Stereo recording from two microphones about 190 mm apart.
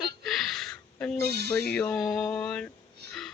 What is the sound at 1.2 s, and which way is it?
Speech, 55° right (ahead or behind).